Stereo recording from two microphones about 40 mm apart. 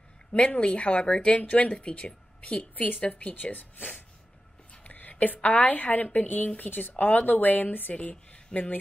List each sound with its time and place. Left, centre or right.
0.3 s speech: left
2.7 s a woman's voice: left
3.0 s a woman's voice: left
4.8 s a sound: left
5.2 s a woman's voice: left